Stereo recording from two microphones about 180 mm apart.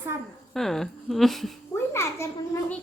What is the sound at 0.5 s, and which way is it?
Speech, centre (ahead or behind).